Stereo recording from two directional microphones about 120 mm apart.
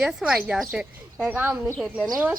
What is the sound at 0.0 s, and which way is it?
Speech, 5° right (ahead or behind).